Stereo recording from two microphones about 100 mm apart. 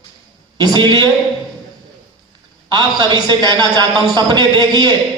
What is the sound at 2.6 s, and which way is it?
A man's voice, 45° right (ahead or behind).